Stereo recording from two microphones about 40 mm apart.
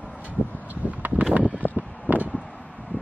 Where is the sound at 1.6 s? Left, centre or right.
Left.